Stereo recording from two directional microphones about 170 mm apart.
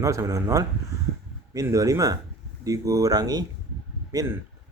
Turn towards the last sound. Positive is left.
turn(degrees=-20)  # may be behind; listen again after turning